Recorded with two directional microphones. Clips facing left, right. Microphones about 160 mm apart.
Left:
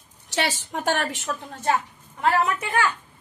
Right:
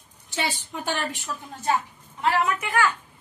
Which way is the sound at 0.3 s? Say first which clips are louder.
Left 3 dB; 80° left.